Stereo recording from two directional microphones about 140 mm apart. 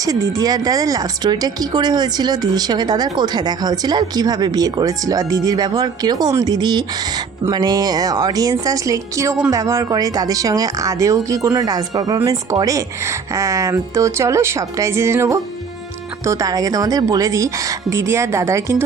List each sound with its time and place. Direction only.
0.0 s speech: 25° right (ahead or behind)